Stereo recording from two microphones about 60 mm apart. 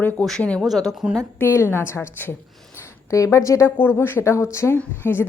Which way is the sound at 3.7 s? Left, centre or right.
Left.